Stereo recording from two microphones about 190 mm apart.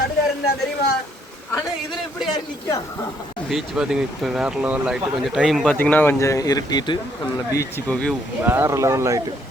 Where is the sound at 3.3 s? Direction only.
Centre (ahead or behind).